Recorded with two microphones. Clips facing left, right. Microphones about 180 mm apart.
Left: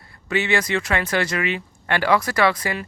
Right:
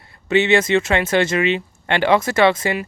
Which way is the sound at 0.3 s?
25° right (ahead or behind).